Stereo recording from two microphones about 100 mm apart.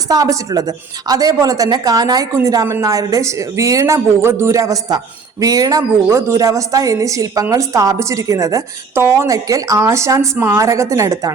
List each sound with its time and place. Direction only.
0.1 s speech: 35° right (ahead or behind)